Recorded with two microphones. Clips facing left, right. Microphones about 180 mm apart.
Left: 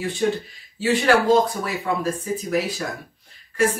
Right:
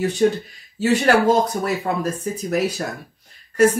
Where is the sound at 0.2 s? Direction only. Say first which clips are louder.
Right 3 dB; 45° right (ahead or behind).